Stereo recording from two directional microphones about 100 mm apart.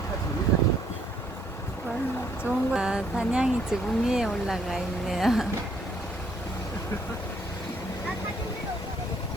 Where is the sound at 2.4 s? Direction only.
10° right (ahead or behind).